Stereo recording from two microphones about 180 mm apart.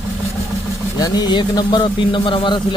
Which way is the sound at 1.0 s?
25° left (ahead or behind).